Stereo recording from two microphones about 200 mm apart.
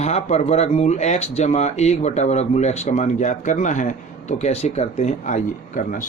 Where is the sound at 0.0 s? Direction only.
30° left (ahead or behind).